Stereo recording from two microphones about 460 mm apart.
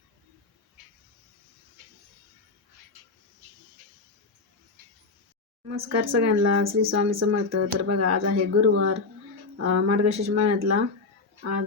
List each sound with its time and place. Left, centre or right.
5.6 s speech: right